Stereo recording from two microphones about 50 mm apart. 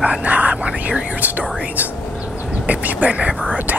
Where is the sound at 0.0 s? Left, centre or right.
Right.